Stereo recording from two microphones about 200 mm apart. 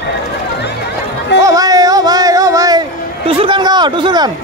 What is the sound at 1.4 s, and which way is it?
Music, 15° right (ahead or behind).